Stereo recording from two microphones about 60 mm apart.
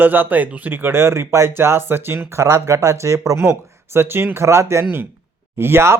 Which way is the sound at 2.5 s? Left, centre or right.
Right.